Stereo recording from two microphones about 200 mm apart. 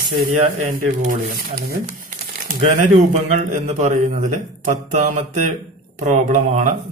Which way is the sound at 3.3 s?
35° right (ahead or behind).